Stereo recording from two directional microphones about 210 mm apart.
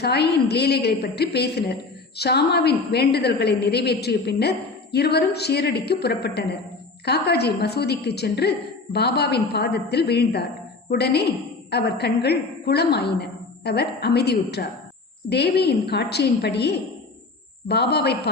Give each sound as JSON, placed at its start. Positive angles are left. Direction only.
{"t": 0.0, "sound": "a woman's voice", "side_deg": 50}